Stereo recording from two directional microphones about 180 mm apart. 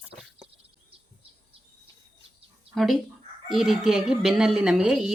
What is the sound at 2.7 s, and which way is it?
Speech, centre (ahead or behind).